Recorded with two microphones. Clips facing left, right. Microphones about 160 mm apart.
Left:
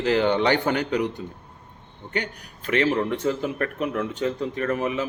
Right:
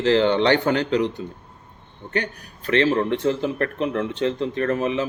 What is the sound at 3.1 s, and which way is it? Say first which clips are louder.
Speech: right 3 dB; 25° right (ahead or behind).